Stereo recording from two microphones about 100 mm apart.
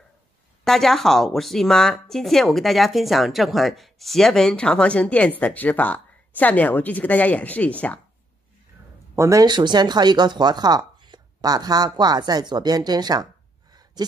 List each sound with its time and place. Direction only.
0.7 s speech: 5° left (ahead or behind)
9.1 s speech: 30° right (ahead or behind)
9.5 s speech: 45° right (ahead or behind)